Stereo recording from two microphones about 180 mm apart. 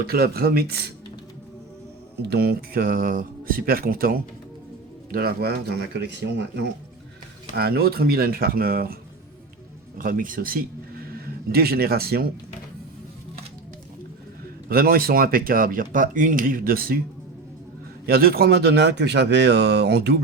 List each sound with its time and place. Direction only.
0.0 s speech: 60° right (ahead or behind)
2.2 s speech: 65° right (ahead or behind)
7.5 s speech: 60° right (ahead or behind)
10.0 s speech: 50° right (ahead or behind)
14.7 s speech: 55° right (ahead or behind)
18.0 s speech: 55° right (ahead or behind)